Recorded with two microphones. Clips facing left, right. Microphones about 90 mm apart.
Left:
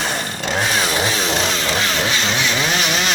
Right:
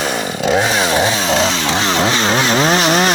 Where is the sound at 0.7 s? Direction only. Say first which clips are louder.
Right 5 dB; 25° right (ahead or behind).